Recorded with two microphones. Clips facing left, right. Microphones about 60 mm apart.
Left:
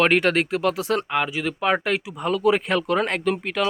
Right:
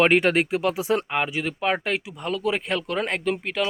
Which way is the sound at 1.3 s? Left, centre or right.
Centre.